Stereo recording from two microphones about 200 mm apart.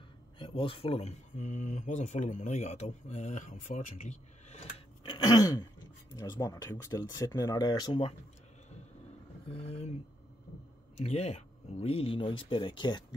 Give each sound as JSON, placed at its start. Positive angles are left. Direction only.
{"t": 0.4, "sound": "speech", "side_deg": 25}
{"t": 9.5, "sound": "speech", "side_deg": 30}
{"t": 11.0, "sound": "speech", "side_deg": 35}